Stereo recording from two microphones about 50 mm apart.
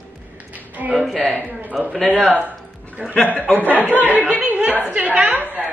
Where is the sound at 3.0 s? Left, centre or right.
Right.